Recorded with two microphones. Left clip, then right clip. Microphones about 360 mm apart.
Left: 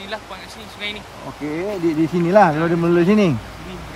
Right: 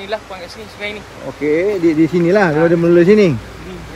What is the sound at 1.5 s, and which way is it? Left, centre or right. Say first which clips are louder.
Speech: right 6 dB; centre.